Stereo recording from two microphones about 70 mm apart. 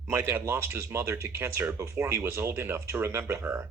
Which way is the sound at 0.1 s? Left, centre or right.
Right.